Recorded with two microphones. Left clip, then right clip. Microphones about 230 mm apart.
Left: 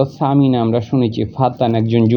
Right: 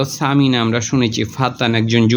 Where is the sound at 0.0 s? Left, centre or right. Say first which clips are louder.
Left 1 dB; centre.